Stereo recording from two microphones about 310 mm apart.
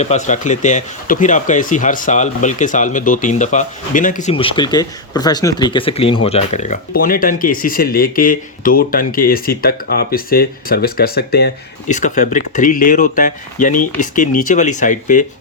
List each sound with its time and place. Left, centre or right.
0.0 s speech: left